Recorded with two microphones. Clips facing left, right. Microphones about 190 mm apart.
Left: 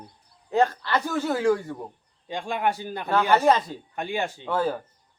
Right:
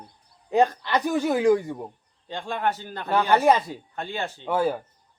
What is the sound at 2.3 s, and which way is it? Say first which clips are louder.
Speech: left 1 dB; 15° left (ahead or behind).